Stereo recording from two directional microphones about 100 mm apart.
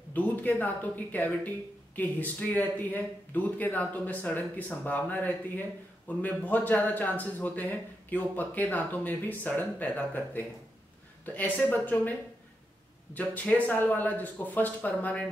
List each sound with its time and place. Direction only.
0.1 s speech: 15° left (ahead or behind)
11.7 s speech: 15° left (ahead or behind)